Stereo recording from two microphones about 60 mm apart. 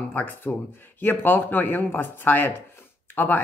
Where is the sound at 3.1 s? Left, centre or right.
Left.